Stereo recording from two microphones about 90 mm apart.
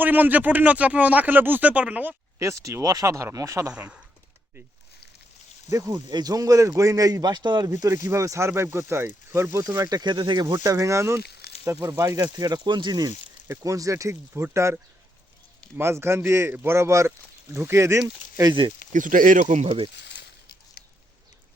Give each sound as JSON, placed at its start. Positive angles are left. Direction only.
{"t": 0.0, "sound": "speech", "side_deg": -20}
{"t": 2.4, "sound": "speech", "side_deg": -35}
{"t": 3.7, "sound": "speech", "side_deg": -15}
{"t": 5.9, "sound": "speech", "side_deg": -50}
{"t": 7.7, "sound": "speech", "side_deg": -40}
{"t": 9.9, "sound": "speech", "side_deg": -55}
{"t": 10.6, "sound": "speech", "side_deg": -40}
{"t": 13.6, "sound": "speech", "side_deg": -40}
{"t": 15.8, "sound": "speech", "side_deg": -30}
{"t": 19.6, "sound": "speech", "side_deg": -85}